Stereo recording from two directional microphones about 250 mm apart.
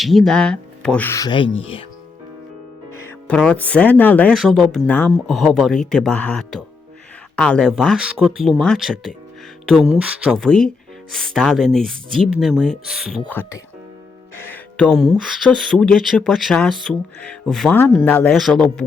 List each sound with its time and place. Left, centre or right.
0.0 s speech: centre
2.9 s speech: centre